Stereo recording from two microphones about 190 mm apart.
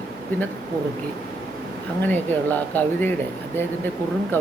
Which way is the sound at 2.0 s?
10° left (ahead or behind).